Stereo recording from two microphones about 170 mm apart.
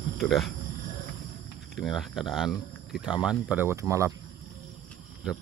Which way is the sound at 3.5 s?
15° right (ahead or behind).